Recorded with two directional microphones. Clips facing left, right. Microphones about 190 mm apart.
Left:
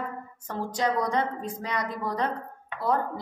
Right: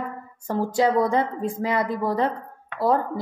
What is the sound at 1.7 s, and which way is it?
Speech, 25° right (ahead or behind).